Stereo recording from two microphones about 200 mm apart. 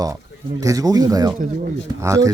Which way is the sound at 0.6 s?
15° right (ahead or behind).